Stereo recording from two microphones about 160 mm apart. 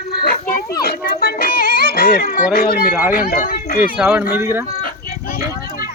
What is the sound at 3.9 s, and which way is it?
Speech, 10° right (ahead or behind).